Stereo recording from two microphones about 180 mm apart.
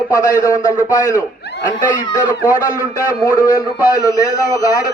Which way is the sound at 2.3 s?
20° left (ahead or behind).